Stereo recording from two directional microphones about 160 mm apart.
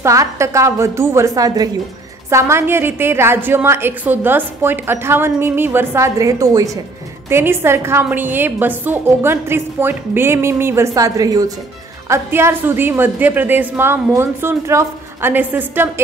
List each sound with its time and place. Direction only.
0.0 s a woman's voice: 20° right (ahead or behind)